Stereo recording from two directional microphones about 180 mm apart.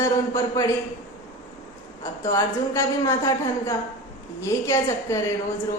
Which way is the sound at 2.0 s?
20° left (ahead or behind).